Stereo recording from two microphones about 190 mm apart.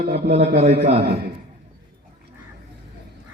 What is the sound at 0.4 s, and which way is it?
Speech, 35° right (ahead or behind).